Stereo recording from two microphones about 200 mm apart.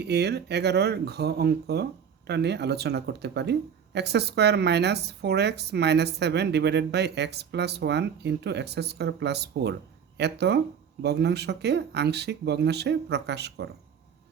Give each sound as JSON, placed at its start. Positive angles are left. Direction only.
{"t": 0.0, "sound": "speech", "side_deg": -55}